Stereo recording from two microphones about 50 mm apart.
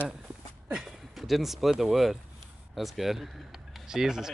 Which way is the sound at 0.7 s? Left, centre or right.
Centre.